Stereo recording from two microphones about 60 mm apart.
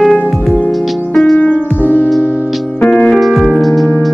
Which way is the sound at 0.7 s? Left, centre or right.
Centre.